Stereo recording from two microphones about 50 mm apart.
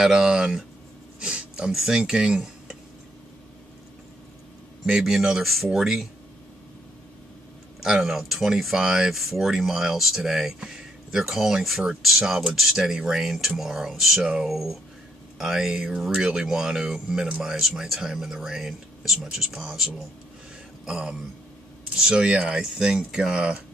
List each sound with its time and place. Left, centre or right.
0.0 s speech: centre
1.2 s a sound: right
1.7 s speech: centre
2.0 s speech: centre
4.8 s speech: centre
7.8 s speech: centre